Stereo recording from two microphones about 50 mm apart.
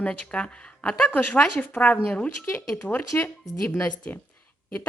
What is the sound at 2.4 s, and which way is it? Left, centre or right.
Speech, left.